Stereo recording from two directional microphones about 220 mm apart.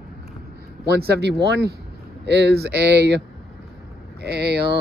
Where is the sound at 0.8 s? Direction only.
45° right (ahead or behind).